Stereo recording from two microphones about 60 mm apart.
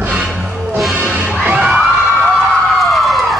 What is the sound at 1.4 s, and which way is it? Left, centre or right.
Bang, centre.